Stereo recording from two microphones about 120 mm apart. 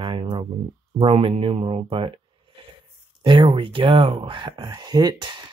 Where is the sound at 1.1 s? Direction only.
55° right (ahead or behind).